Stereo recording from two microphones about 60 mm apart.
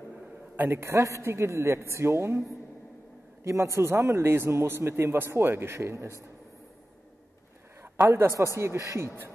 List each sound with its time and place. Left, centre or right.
0.6 s a woman's voice: right
3.4 s a man's voice: right
5.8 s a woman's voice: right
8.5 s a woman's voice: right